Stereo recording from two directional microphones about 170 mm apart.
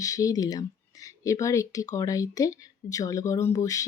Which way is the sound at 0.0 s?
20° left (ahead or behind).